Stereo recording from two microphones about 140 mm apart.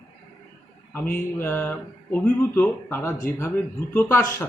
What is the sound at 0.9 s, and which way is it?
Speech, 15° left (ahead or behind).